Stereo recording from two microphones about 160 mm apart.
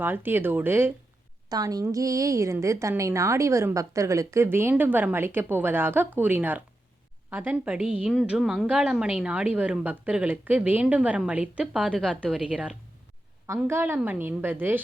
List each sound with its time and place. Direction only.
0.0 s a woman's voice: 15° right (ahead or behind)
1.5 s a woman's voice: 25° right (ahead or behind)